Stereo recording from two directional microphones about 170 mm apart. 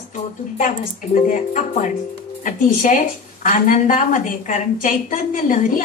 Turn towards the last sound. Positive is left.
turn(degrees=50)  # may be behind; listen again after turning